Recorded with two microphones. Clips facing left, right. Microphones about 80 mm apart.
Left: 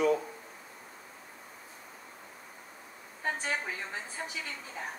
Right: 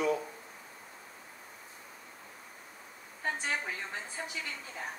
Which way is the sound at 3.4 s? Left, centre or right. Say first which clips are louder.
Left 1 dB; centre.